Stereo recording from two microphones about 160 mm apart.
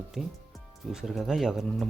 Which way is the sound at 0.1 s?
Centre (ahead or behind).